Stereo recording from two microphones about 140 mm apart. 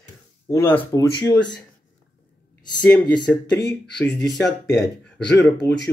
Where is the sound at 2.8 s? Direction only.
10° left (ahead or behind).